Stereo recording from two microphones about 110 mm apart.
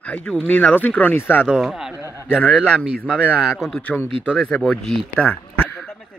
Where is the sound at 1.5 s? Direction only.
5° right (ahead or behind).